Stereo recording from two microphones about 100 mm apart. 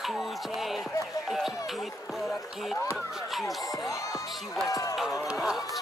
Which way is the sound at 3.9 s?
30° left (ahead or behind).